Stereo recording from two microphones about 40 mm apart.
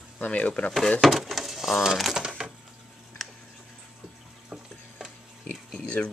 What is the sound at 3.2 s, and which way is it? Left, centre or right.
Tick, centre.